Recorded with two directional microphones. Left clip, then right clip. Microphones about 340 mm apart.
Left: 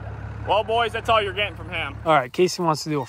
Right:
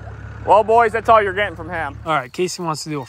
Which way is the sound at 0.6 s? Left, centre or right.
Right.